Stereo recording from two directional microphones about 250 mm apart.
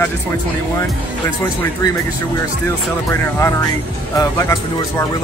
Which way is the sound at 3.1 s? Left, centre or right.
Centre.